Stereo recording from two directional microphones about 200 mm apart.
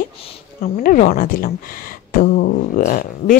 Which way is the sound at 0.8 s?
45° left (ahead or behind).